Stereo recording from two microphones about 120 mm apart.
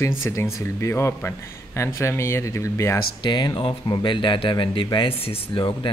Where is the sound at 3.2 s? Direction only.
40° left (ahead or behind).